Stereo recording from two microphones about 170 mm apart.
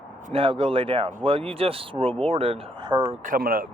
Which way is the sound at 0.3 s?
35° right (ahead or behind).